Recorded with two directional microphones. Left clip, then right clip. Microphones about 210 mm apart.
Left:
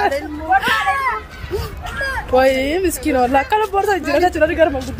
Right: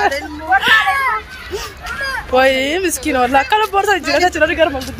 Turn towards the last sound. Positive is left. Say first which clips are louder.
# right 1 dB
turn(degrees=-15)  # may be behind; listen again after turning